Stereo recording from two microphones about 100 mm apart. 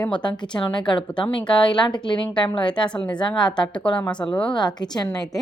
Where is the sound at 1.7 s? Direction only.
50° left (ahead or behind).